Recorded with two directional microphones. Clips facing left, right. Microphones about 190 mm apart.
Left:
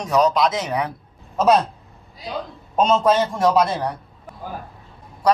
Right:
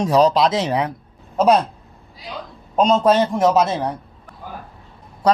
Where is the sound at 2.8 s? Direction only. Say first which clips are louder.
Right 2 dB; 15° right (ahead or behind).